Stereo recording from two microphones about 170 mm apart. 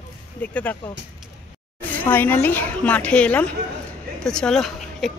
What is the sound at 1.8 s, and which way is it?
Speech, 10° left (ahead or behind).